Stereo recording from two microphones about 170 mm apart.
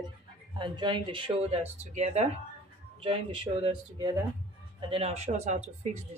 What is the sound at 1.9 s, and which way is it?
Speech, 40° right (ahead or behind).